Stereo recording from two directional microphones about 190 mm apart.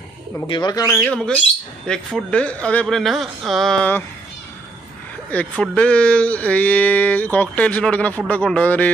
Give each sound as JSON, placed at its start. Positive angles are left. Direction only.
{"t": 0.5, "sound": "speech", "side_deg": 20}
{"t": 1.0, "sound": "speech", "side_deg": 5}
{"t": 5.3, "sound": "speech", "side_deg": 5}